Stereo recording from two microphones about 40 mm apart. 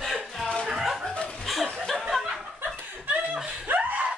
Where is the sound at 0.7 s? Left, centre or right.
Centre.